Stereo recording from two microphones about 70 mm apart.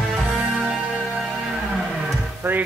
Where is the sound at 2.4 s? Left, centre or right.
Right.